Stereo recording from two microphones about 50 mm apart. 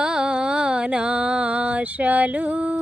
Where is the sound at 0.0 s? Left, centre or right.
Centre.